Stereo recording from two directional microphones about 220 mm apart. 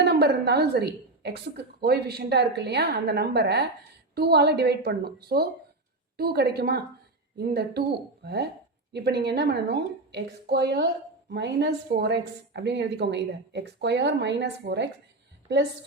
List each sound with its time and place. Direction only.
0.0 s a woman's voice: 45° right (ahead or behind)